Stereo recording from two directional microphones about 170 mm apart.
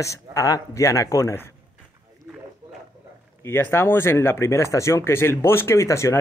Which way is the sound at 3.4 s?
15° left (ahead or behind).